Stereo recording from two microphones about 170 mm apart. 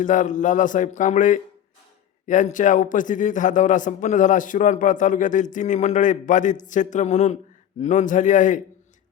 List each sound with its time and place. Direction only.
0.0 s a man's voice: 50° left (ahead or behind)